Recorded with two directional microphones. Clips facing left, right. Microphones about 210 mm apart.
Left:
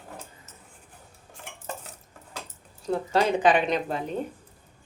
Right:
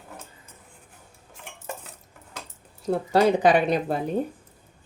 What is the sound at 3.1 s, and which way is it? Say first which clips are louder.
Speech: right 3 dB; 40° right (ahead or behind).